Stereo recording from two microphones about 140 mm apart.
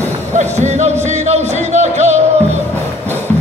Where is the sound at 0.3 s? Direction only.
55° right (ahead or behind).